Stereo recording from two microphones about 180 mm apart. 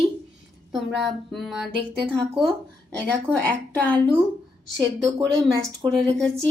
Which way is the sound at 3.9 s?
30° right (ahead or behind).